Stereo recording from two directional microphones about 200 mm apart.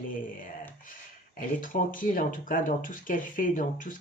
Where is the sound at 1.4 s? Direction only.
45° left (ahead or behind).